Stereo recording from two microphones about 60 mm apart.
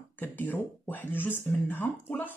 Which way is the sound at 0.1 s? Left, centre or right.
Left.